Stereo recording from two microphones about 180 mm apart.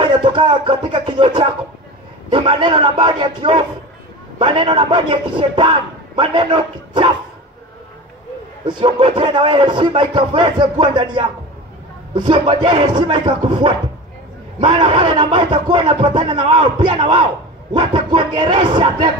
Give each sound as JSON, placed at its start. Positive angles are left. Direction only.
{"t": 0.0, "sound": "a man's voice", "side_deg": -25}
{"t": 8.6, "sound": "a man's voice", "side_deg": -25}